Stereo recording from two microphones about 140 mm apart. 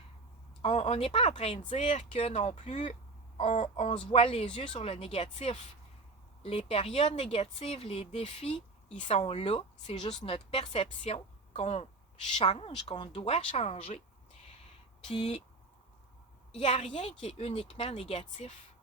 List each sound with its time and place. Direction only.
0.6 s a woman's voice: 45° left (ahead or behind)
15.0 s speech: 45° left (ahead or behind)
16.5 s speech: 45° left (ahead or behind)